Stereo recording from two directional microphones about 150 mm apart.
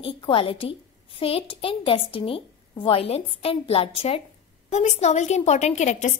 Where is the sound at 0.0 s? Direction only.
35° left (ahead or behind).